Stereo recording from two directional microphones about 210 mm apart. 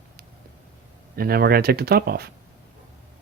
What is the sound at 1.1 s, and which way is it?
Speech, 45° right (ahead or behind).